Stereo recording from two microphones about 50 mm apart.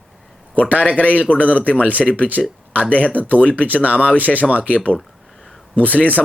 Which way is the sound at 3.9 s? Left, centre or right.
Left.